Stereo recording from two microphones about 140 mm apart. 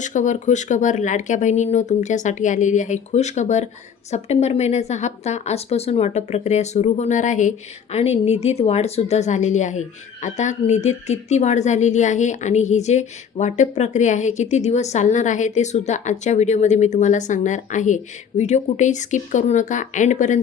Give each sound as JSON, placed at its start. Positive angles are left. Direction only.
{"t": 0.0, "sound": "a woman's voice", "side_deg": 60}
{"t": 7.9, "sound": "a woman's voice", "side_deg": 50}